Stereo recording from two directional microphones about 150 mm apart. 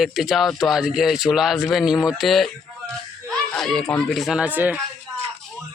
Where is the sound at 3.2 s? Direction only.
Centre (ahead or behind).